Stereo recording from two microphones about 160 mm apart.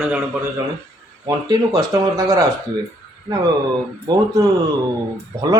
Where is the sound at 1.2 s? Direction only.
25° right (ahead or behind).